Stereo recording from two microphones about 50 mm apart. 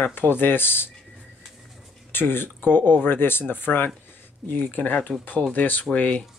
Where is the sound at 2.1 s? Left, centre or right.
Left.